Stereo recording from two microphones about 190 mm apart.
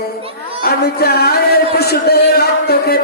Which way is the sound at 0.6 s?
55° left (ahead or behind).